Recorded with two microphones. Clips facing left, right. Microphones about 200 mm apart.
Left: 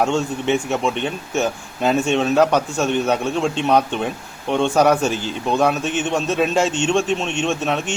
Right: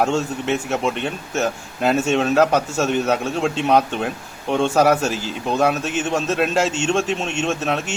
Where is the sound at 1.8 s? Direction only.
Centre (ahead or behind).